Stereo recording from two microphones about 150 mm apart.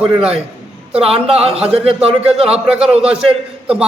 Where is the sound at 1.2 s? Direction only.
40° right (ahead or behind).